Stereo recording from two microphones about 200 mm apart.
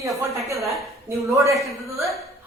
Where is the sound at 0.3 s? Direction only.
15° right (ahead or behind).